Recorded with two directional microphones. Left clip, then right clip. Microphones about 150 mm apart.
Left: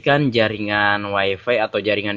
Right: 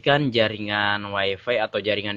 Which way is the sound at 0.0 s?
10° right (ahead or behind).